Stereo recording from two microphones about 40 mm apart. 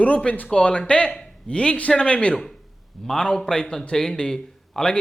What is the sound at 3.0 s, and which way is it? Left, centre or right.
A man's voice, centre.